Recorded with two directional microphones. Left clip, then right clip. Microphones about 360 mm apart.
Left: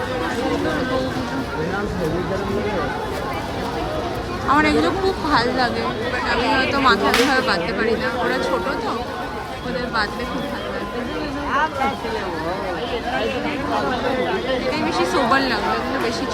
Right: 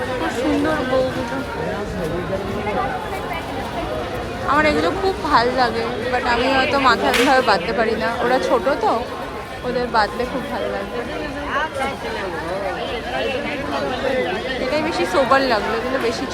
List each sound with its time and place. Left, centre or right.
4.5 s speech: centre
6.2 s speech: centre
6.8 s speech: centre
11.5 s chatter: left
14.7 s speech: centre